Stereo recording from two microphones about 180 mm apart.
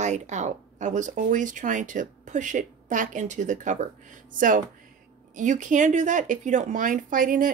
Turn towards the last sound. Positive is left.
turn(degrees=-50)  # may be behind; listen again after turning